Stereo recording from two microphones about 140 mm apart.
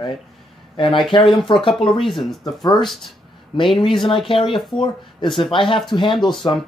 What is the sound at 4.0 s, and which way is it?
Speech, 35° left (ahead or behind).